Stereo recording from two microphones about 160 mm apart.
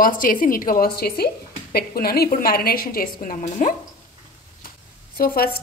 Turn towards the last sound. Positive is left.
turn(degrees=65)  # may be behind; listen again after turning